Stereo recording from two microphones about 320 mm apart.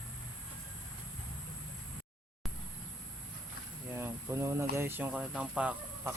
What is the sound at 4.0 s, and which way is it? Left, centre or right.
Speech, centre.